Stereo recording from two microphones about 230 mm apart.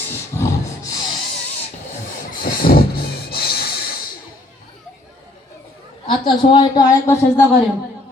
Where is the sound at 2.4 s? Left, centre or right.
Left.